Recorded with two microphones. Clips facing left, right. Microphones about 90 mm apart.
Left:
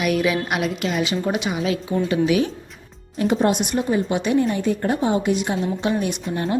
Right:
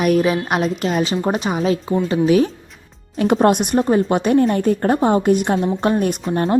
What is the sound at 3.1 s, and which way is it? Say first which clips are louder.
Speech: right 4 dB; 65° right (ahead or behind).